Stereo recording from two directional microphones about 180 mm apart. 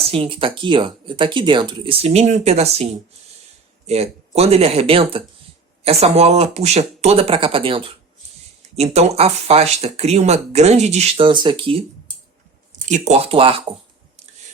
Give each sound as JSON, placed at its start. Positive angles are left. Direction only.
{"t": 0.1, "sound": "speech", "side_deg": -30}
{"t": 3.8, "sound": "speech", "side_deg": -35}
{"t": 11.3, "sound": "speech", "side_deg": -25}
{"t": 12.8, "sound": "speech", "side_deg": -40}